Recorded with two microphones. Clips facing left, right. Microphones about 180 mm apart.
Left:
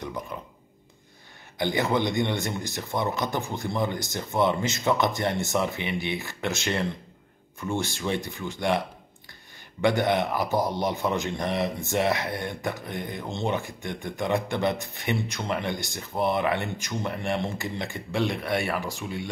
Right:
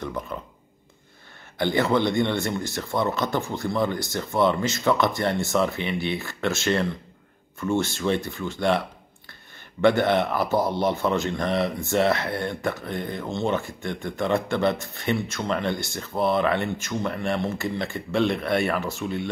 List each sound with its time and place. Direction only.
0.3 s a man's voice: 15° left (ahead or behind)
1.6 s a man's voice: 15° left (ahead or behind)